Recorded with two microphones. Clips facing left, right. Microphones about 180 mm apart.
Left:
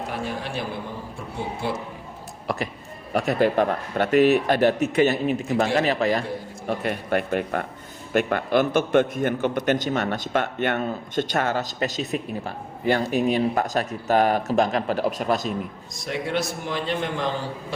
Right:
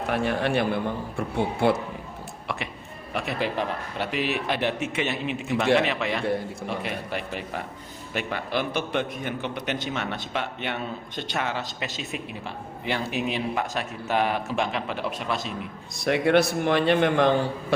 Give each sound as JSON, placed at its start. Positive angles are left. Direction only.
{"t": 0.1, "sound": "a man's voice", "side_deg": -65}
{"t": 2.5, "sound": "a man's voice", "side_deg": 40}
{"t": 16.0, "sound": "a man's voice", "side_deg": -65}